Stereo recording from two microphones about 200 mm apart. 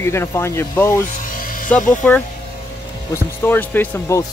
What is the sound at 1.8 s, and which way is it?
Speech, 40° left (ahead or behind).